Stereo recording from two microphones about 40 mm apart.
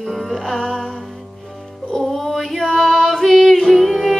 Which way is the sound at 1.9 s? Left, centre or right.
Centre.